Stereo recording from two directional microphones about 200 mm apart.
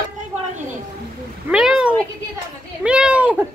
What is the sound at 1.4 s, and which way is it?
A woman's voice, 5° right (ahead or behind).